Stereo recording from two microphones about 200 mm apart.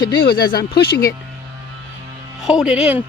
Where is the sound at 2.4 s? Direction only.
5° right (ahead or behind).